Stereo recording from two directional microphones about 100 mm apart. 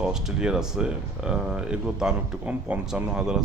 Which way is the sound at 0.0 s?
5° right (ahead or behind).